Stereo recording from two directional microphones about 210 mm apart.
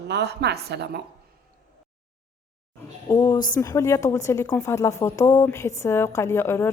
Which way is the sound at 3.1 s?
20° left (ahead or behind).